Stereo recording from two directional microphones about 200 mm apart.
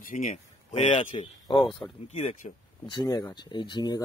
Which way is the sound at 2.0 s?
35° left (ahead or behind).